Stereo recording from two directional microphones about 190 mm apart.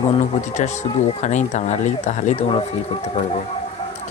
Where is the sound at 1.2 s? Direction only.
40° left (ahead or behind).